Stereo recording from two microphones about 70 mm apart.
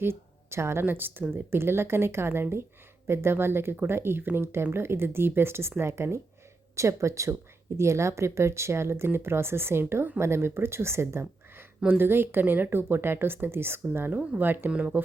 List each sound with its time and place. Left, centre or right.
0.0 s speech: right
14.7 s speech: centre